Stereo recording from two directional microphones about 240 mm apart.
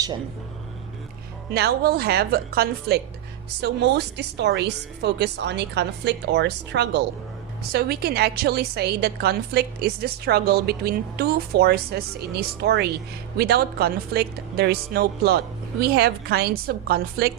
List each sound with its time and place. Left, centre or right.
1.5 s a woman's voice: right